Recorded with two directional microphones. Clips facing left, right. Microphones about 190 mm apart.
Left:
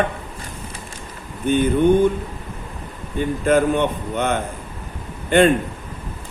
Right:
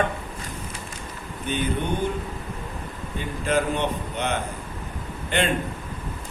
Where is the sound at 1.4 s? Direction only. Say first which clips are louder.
Left 9 dB; 50° left (ahead or behind).